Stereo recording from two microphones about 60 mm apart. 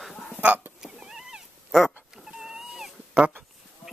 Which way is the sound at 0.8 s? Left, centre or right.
Centre.